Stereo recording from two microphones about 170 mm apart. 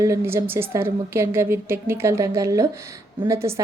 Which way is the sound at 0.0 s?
15° right (ahead or behind).